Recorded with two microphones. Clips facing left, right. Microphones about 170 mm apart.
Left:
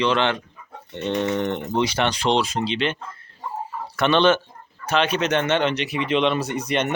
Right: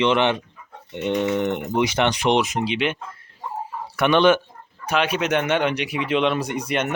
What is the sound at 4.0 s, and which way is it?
Speech, 10° right (ahead or behind).